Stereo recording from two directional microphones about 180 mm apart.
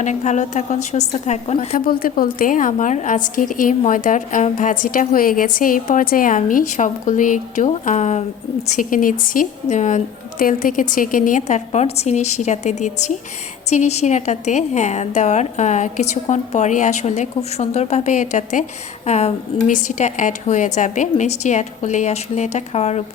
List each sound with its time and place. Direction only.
0.0 s a woman's voice: 40° left (ahead or behind)
1.5 s a woman's voice: 50° left (ahead or behind); by 23.0 s 35° left (ahead or behind)